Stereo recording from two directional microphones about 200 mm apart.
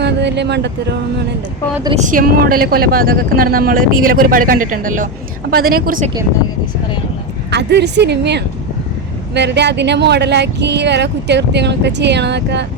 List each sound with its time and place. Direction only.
0.0 s speech: 60° right (ahead or behind)
2.0 s speech: 40° right (ahead or behind)
7.5 s speech: 60° right (ahead or behind)